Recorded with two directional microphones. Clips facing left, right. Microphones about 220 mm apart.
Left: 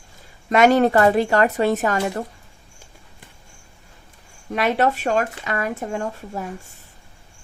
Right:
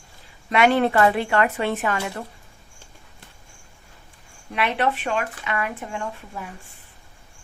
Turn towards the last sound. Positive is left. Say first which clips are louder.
# left 5 dB
turn(degrees=40)  # may be behind; listen again after turning